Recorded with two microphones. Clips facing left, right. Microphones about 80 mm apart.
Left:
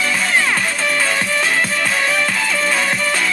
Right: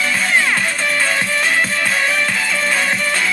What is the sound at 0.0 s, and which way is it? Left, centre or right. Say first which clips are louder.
Music: right 1 dB; centre.